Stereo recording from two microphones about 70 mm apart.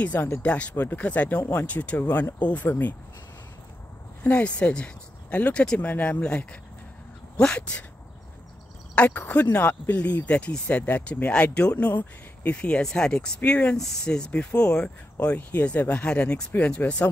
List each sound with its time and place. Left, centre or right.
0.0 s speech: left
2.0 s speech: left
4.2 s speech: left
8.9 s speech: centre